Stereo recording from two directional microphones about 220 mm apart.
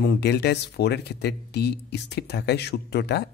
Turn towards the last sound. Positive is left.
turn(degrees=50)  # may be behind; listen again after turning